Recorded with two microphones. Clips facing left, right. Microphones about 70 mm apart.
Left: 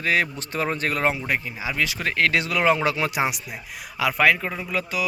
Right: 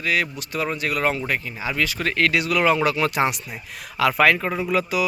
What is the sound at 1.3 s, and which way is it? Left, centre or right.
Speech, centre.